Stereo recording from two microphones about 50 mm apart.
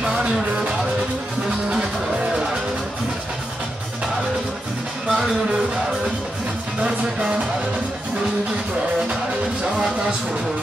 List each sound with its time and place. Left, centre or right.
0.0 s music: centre
5.0 s music: centre
6.8 s music: right